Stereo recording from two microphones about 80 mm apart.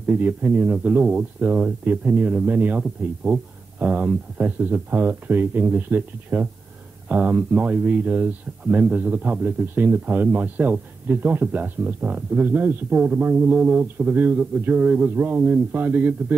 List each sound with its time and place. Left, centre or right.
0.0 s speech: right
3.8 s speech: right